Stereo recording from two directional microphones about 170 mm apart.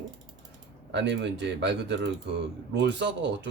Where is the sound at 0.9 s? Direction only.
90° right.